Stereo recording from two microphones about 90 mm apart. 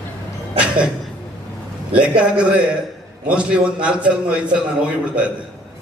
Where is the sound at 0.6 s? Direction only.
10° right (ahead or behind).